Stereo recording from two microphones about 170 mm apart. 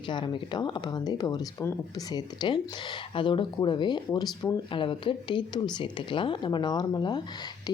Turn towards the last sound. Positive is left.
turn(degrees=25)  # may be behind; listen again after turning